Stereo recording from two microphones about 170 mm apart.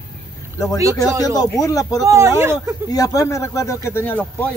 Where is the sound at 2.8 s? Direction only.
20° left (ahead or behind).